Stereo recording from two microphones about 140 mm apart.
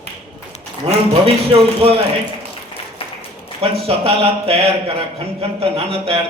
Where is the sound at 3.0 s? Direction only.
40° left (ahead or behind).